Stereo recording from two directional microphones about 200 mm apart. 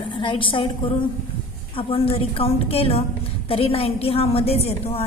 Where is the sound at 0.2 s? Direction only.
25° left (ahead or behind).